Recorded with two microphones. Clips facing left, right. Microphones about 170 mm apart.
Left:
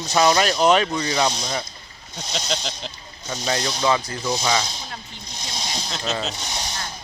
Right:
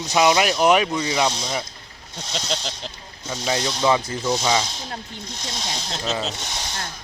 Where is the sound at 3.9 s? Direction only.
25° right (ahead or behind).